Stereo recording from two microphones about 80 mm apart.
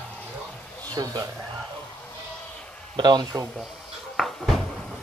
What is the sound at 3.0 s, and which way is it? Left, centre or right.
Speech, right.